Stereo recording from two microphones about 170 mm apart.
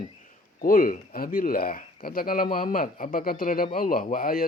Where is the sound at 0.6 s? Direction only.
55° left (ahead or behind).